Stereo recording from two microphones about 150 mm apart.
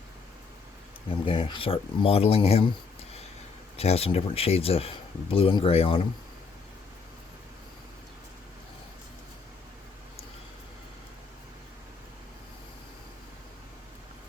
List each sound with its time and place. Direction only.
1.2 s speech: 35° left (ahead or behind)
3.8 s speech: 40° left (ahead or behind)